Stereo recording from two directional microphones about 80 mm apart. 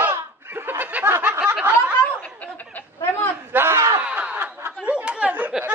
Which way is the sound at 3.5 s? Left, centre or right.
Right.